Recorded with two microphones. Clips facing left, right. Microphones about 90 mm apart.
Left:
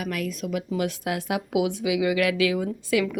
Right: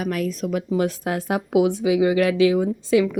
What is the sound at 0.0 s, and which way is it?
A woman's voice, 35° right (ahead or behind).